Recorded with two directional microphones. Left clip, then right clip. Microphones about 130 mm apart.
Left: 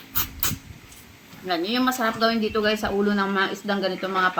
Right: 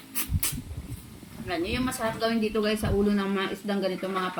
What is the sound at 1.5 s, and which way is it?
Speech, 15° right (ahead or behind).